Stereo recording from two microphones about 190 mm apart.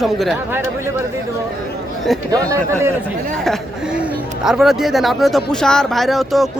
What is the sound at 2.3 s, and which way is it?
Speech, 15° right (ahead or behind).